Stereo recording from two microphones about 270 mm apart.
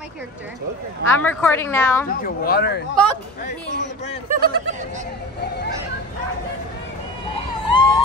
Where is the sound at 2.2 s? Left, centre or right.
Left.